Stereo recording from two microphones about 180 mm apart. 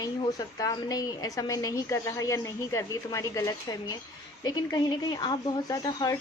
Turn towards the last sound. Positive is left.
turn(degrees=20)  # may be behind; listen again after turning